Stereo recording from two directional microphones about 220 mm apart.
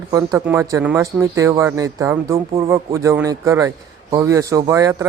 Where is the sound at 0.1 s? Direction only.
15° right (ahead or behind).